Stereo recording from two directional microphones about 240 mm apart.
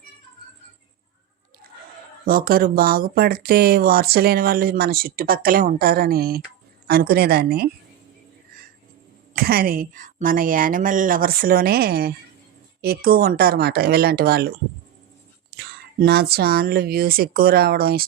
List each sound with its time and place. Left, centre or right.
2.2 s speech: right
9.3 s speech: right
15.5 s speech: right